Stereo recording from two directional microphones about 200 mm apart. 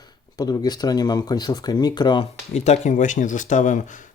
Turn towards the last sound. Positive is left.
turn(degrees=40)  # may be behind; listen again after turning